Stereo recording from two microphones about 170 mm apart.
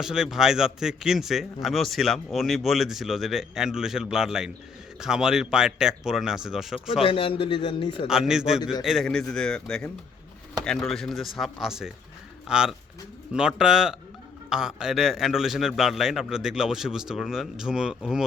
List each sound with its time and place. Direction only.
0.0 s a man's voice: 5° right (ahead or behind)
7.0 s a man's voice: 30° left (ahead or behind)
8.0 s a man's voice: 5° right (ahead or behind)